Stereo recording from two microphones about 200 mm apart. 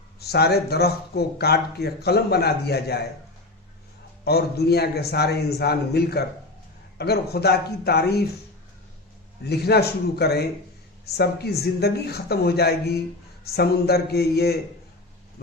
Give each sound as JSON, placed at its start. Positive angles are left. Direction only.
{"t": 0.2, "sound": "speech", "side_deg": 55}
{"t": 4.2, "sound": "speech", "side_deg": 55}
{"t": 9.4, "sound": "a man's voice", "side_deg": 55}